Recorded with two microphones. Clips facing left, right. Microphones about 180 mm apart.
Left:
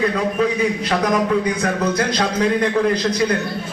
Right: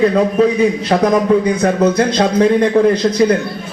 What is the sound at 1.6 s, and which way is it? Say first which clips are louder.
A man's voice: right 7 dB; 30° right (ahead or behind).